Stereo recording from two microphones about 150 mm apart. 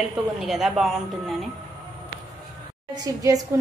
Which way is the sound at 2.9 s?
25° right (ahead or behind).